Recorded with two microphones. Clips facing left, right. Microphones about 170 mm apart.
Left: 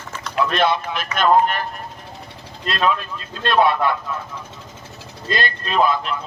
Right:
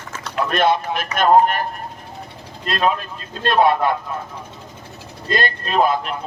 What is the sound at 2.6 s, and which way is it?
Speech, 45° right (ahead or behind).